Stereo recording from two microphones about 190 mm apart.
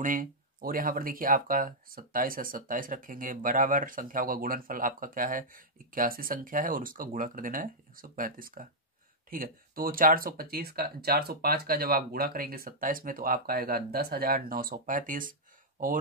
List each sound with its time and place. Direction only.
0.0 s speech: 45° right (ahead or behind)